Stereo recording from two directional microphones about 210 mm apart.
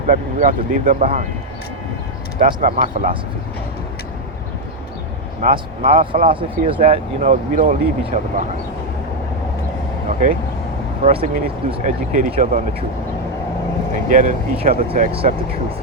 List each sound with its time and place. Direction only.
0.1 s speech: 40° right (ahead or behind)
2.4 s speech: 40° right (ahead or behind)
5.4 s speech: 40° right (ahead or behind)
6.2 s speech: 25° right (ahead or behind)
10.1 s speech: 40° right (ahead or behind)
11.0 s speech: 25° right (ahead or behind)
13.9 s speech: 40° right (ahead or behind)